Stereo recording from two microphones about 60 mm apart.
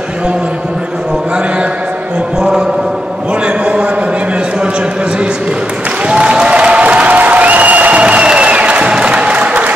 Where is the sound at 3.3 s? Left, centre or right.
Centre.